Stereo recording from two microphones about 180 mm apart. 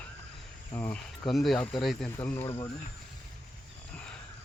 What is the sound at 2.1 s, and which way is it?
Speech, 15° left (ahead or behind).